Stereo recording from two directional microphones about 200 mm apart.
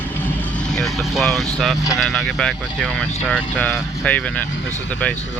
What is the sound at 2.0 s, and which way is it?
Speech, centre (ahead or behind).